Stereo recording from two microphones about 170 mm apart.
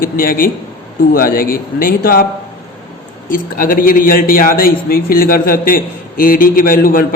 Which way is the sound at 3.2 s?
55° left (ahead or behind).